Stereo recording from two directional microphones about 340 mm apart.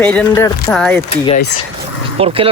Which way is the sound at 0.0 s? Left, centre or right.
Centre.